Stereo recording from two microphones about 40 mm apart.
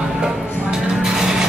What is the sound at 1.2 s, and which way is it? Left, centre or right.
Music, centre.